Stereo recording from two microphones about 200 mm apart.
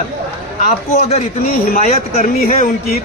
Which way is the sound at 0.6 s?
35° left (ahead or behind).